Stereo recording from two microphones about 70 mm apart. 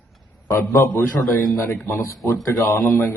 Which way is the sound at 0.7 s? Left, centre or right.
Left.